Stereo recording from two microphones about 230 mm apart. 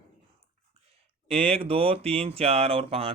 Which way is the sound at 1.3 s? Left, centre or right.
Right.